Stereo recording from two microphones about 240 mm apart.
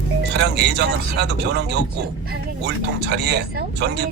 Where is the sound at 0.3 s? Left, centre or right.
Right.